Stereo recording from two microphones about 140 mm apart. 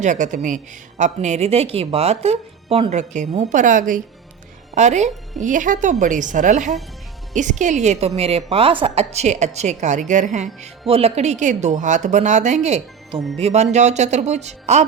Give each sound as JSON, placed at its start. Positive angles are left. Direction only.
{"t": 0.0, "sound": "a woman's voice", "side_deg": -60}
{"t": 4.7, "sound": "speech", "side_deg": -55}
{"t": 5.4, "sound": "a woman's voice", "side_deg": -70}
{"t": 10.8, "sound": "a woman's voice", "side_deg": -45}
{"t": 13.1, "sound": "speech", "side_deg": 5}
{"t": 13.4, "sound": "a woman's voice", "side_deg": -50}